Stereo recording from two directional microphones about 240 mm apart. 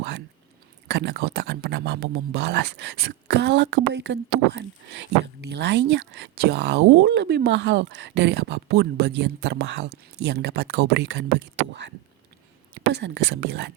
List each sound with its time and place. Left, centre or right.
0.9 s speech: right